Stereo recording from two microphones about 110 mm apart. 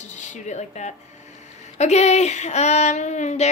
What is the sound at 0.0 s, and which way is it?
Speech, 90° left.